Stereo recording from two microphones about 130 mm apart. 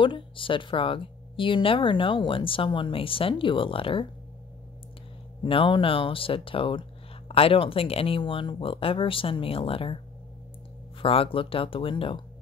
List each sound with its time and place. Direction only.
0.0 s a woman's voice: 40° left (ahead or behind)
5.4 s speech: 40° left (ahead or behind)
11.0 s speech: 45° left (ahead or behind)